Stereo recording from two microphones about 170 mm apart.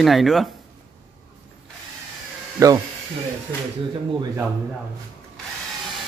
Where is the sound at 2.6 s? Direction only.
20° right (ahead or behind).